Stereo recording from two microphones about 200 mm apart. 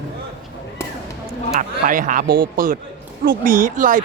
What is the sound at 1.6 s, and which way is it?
Speech, 40° right (ahead or behind).